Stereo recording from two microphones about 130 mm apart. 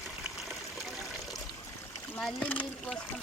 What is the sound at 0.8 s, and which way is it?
Trickle, centre (ahead or behind).